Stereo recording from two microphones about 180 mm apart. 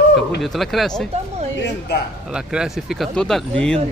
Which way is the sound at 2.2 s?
5° right (ahead or behind).